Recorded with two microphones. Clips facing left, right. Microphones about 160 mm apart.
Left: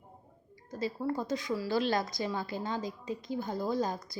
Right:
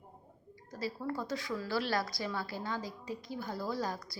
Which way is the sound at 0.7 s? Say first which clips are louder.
Left 4 dB; 20° left (ahead or behind).